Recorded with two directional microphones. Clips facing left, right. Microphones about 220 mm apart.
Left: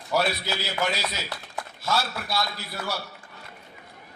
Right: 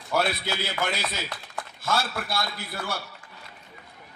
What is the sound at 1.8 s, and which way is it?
A man's voice, 50° right (ahead or behind).